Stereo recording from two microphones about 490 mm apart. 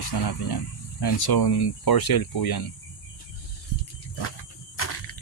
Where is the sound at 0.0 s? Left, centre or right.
Left.